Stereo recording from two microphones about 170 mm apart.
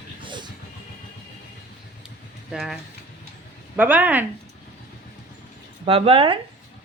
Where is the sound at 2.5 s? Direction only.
Centre (ahead or behind).